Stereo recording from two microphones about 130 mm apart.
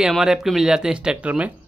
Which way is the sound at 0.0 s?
5° right (ahead or behind).